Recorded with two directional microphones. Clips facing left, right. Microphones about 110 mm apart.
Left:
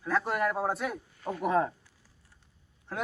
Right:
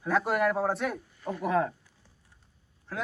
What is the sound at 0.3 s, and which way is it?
Speech, centre (ahead or behind).